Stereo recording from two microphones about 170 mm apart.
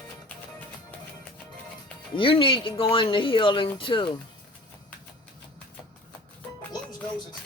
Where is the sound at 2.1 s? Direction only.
30° left (ahead or behind).